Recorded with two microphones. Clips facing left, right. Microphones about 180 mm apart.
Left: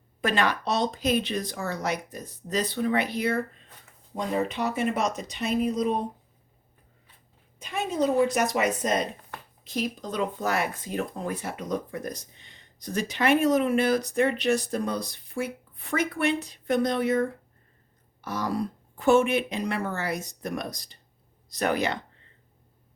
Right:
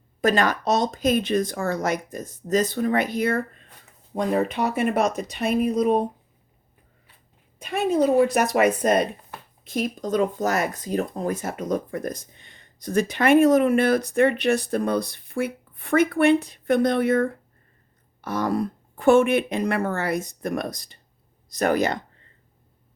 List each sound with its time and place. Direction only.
0.2 s speech: 40° right (ahead or behind)
7.6 s speech: 60° right (ahead or behind)